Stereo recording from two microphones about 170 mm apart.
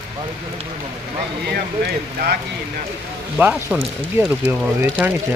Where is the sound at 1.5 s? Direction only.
70° right (ahead or behind).